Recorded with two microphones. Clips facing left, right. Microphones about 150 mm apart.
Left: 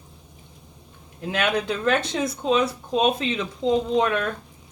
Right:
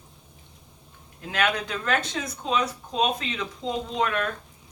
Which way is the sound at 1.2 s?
25° left (ahead or behind).